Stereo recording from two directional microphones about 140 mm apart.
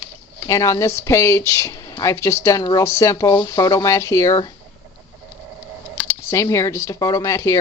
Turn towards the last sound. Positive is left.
turn(degrees=20)  # may be behind; listen again after turning